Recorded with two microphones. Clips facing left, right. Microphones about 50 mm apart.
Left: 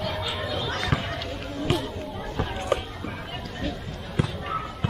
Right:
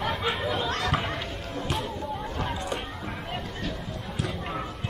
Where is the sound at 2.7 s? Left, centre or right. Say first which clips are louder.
Left 6 dB; left.